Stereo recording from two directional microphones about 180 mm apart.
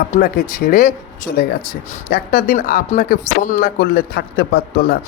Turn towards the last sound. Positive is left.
turn(degrees=60)  # may be behind; listen again after turning